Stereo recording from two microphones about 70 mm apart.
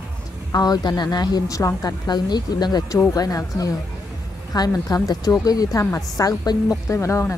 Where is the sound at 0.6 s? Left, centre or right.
Left.